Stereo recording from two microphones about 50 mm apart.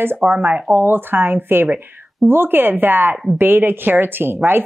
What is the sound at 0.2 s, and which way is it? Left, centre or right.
Speech, right.